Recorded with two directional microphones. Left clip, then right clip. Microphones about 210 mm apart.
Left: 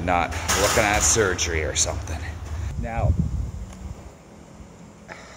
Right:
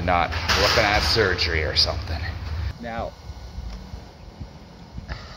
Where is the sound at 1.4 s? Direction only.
5° left (ahead or behind).